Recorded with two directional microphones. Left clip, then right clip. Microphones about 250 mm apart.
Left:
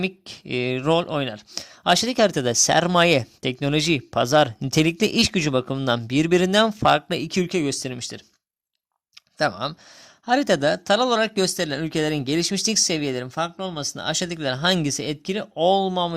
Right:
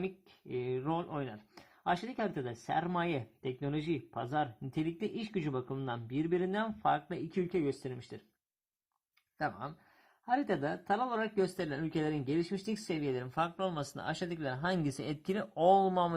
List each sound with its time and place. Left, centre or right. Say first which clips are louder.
0.0 s speech: left 13 dB; left
2.0 s speech: left 18 dB; left
5.3 s speech: left 15 dB; left
9.4 s speech: left 14 dB; left